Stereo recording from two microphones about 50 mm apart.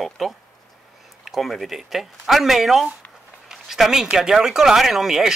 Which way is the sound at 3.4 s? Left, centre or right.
Centre.